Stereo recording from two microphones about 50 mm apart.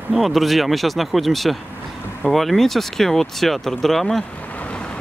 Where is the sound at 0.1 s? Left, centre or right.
Centre.